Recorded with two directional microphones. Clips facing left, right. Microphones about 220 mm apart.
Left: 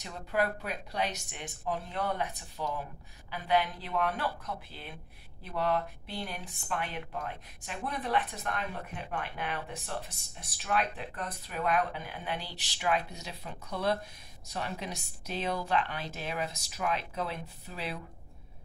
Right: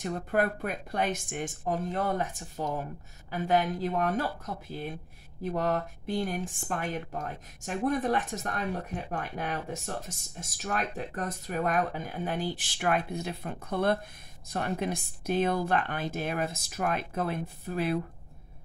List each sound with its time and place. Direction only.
0.0 s speech: 50° right (ahead or behind)